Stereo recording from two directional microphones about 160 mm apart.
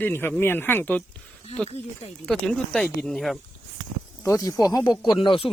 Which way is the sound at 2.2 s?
5° left (ahead or behind).